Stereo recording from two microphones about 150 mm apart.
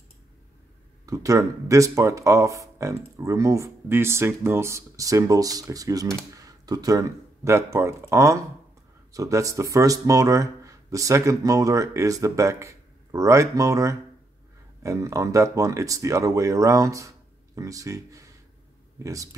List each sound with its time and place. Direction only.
1.0 s speech: 20° right (ahead or behind)